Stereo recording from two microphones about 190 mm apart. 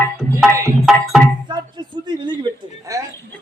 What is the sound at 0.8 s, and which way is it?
Music, centre (ahead or behind).